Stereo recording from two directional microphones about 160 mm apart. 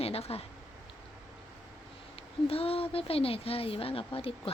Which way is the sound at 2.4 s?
35° left (ahead or behind).